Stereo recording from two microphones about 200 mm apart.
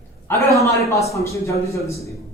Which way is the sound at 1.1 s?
15° left (ahead or behind).